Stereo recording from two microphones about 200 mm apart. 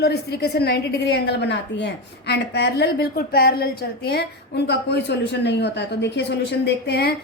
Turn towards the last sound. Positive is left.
turn(degrees=55)  # may be behind; listen again after turning